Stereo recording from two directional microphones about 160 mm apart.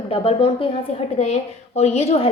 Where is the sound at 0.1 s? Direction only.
35° left (ahead or behind).